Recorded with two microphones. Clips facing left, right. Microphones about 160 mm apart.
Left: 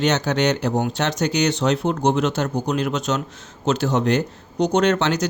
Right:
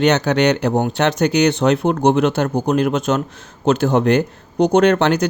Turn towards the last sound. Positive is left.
turn(degrees=-55)  # may be behind; listen again after turning